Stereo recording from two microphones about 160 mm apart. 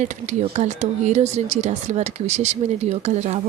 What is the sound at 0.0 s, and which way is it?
Speech, 50° right (ahead or behind).